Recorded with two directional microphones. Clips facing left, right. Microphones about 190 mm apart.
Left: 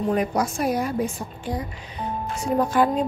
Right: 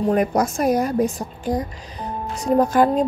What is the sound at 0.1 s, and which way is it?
A woman's voice, 45° right (ahead or behind).